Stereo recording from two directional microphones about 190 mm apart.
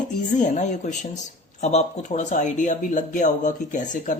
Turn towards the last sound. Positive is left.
turn(degrees=40)  # may be behind; listen again after turning